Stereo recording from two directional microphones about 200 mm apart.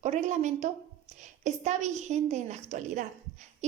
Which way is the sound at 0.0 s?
35° right (ahead or behind).